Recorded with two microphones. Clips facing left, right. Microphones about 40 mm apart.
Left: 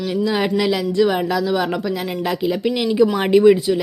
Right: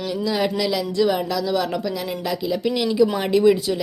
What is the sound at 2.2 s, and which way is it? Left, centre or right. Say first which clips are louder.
Speech: left 4 dB; left.